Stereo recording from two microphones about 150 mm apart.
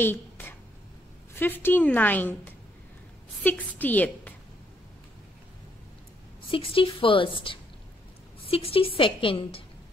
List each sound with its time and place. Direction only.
0.0 s a sound: 15° left (ahead or behind)
1.3 s a woman's voice: 15° left (ahead or behind)
6.5 s a woman's voice: 35° left (ahead or behind)